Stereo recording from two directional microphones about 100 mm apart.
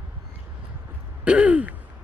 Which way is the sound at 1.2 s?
10° right (ahead or behind).